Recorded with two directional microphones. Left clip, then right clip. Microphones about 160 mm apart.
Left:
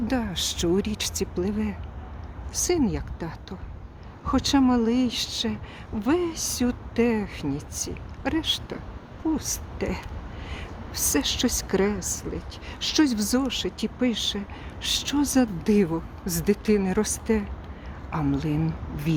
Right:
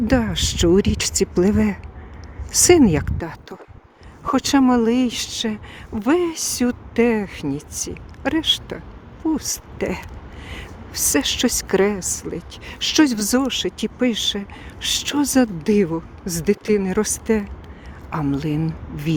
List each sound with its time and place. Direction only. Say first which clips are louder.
0.1 s speech: right 8 dB; 25° right (ahead or behind)
1.4 s a woman's voice: right 10 dB; 45° right (ahead or behind)
15.6 s speech: right 4 dB; 20° right (ahead or behind)
17.0 s speech: right 5 dB; 35° right (ahead or behind)
18.2 s speech: right 4 dB; 20° right (ahead or behind)